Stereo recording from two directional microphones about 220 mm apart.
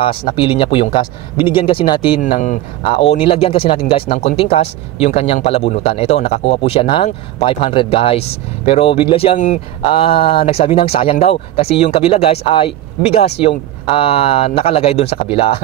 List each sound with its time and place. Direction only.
0.1 s speech: 45° left (ahead or behind)
0.4 s speech: 25° left (ahead or behind)
2.2 s speech: 35° left (ahead or behind)